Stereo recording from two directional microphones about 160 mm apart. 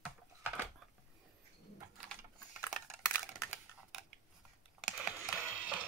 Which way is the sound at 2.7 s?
5° left (ahead or behind).